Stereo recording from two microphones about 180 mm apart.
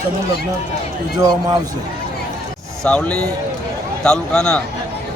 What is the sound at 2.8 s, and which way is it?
Speech, 5° left (ahead or behind).